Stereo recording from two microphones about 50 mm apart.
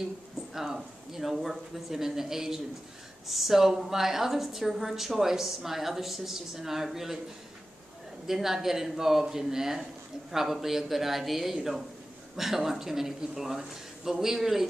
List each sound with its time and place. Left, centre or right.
0.5 s a woman's voice: centre
8.3 s a woman's voice: centre